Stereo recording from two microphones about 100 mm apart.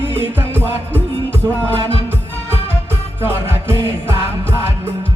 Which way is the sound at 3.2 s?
25° right (ahead or behind).